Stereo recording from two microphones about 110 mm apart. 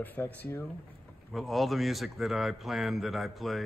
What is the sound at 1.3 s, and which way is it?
A man's voice, centre (ahead or behind).